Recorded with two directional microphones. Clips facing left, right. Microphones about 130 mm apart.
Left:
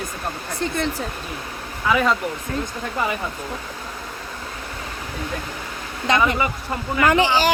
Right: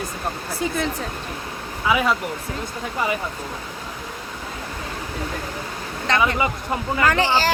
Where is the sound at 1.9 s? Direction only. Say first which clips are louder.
Left 1 dB; 5° right (ahead or behind).